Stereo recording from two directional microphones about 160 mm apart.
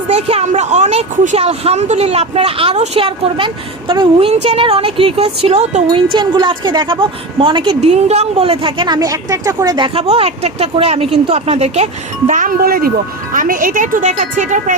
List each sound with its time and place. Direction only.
0.1 s speech: 45° right (ahead or behind)
6.1 s speech: 30° right (ahead or behind)
7.8 s speech: 40° right (ahead or behind)
12.3 s speech: 55° right (ahead or behind)